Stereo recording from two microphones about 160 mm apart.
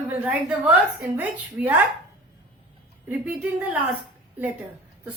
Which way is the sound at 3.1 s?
10° right (ahead or behind).